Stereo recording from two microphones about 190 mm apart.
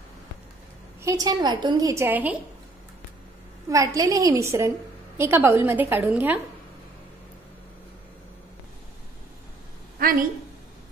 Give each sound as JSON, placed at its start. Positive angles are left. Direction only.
{"t": 1.0, "sound": "a woman's voice", "side_deg": -20}
{"t": 3.7, "sound": "a woman's voice", "side_deg": -15}
{"t": 10.0, "sound": "a woman's voice", "side_deg": -45}